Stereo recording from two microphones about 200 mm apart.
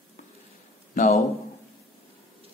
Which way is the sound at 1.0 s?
35° left (ahead or behind).